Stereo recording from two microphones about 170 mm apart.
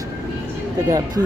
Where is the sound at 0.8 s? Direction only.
20° right (ahead or behind).